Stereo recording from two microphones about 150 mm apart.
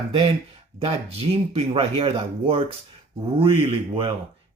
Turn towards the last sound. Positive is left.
turn(degrees=-35)  # may be behind; listen again after turning